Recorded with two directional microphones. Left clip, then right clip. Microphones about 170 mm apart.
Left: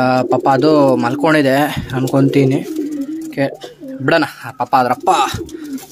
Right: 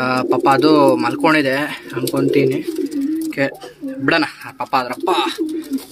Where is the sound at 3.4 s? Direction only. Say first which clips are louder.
Left 2 dB; 15° left (ahead or behind).